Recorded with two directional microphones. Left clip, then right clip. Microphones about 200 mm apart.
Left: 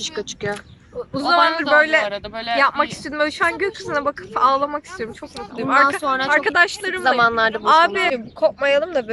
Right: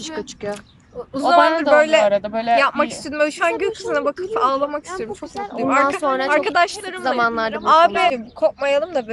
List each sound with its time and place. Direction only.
0.0 s speech: centre (ahead or behind)
2.0 s speech: 35° right (ahead or behind)
2.6 s speech: centre (ahead or behind)